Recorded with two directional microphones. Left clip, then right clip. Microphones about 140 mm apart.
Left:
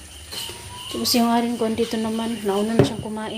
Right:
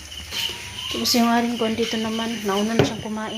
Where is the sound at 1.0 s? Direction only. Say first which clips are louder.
Even; 15° left (ahead or behind).